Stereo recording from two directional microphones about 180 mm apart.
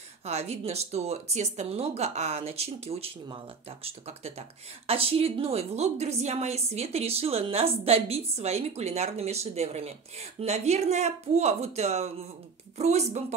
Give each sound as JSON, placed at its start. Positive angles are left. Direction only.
{"t": 0.2, "sound": "speech", "side_deg": -35}